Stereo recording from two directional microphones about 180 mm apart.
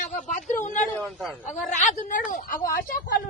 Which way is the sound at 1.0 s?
Centre (ahead or behind).